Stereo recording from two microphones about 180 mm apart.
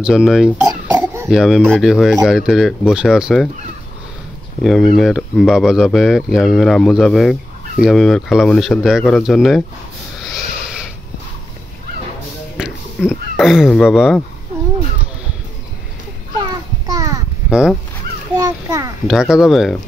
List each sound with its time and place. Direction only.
0.0 s speech: 5° right (ahead or behind)
0.7 s cough: 20° right (ahead or behind)
1.3 s speech: 5° right (ahead or behind)
4.6 s speech: centre (ahead or behind)
12.6 s a sound: 5° right (ahead or behind)
13.0 s speech: centre (ahead or behind)
16.3 s a sound: 20° right (ahead or behind)
17.5 s speech: 5° right (ahead or behind)
18.3 s a sound: 20° right (ahead or behind)
19.0 s speech: 5° right (ahead or behind)